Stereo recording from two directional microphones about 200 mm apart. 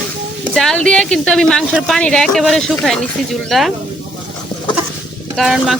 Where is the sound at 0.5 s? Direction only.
5° left (ahead or behind).